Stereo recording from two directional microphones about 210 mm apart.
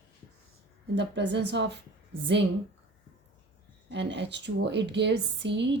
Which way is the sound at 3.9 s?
55° right (ahead or behind).